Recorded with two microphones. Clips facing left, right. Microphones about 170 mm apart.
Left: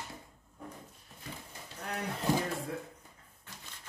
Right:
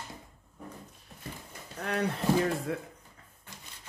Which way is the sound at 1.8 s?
75° right (ahead or behind).